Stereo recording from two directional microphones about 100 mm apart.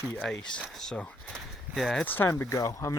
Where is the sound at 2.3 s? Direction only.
30° left (ahead or behind).